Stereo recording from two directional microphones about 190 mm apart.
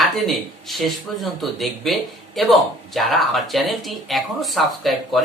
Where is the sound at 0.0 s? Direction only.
Centre (ahead or behind).